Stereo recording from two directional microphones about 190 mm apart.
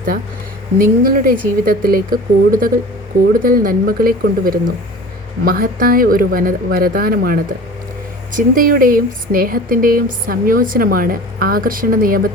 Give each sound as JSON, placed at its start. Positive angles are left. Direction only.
{"t": 0.8, "sound": "speech", "side_deg": -50}